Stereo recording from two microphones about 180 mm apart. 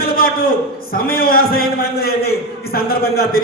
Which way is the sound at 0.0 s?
55° left (ahead or behind).